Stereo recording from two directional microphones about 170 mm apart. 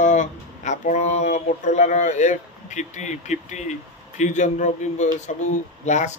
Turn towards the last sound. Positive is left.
turn(degrees=45)  # may be behind; listen again after turning